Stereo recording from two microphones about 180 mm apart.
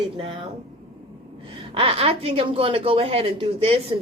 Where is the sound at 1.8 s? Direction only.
30° right (ahead or behind).